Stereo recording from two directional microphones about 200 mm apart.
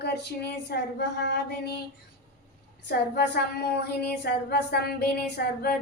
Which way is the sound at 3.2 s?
55° left (ahead or behind).